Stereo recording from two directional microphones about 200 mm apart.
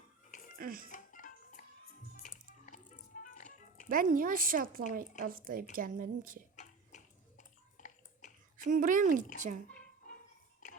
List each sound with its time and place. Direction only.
0.6 s speech: 45° right (ahead or behind)
0.9 s music: 40° left (ahead or behind)
3.8 s speech: 45° right (ahead or behind)
6.6 s bathtub: 40° left (ahead or behind)
8.5 s speech: 40° right (ahead or behind)